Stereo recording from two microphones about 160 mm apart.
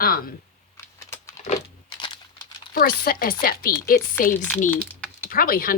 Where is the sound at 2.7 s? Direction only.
65° left (ahead or behind).